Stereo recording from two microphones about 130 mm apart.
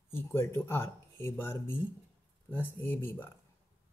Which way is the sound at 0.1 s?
20° left (ahead or behind).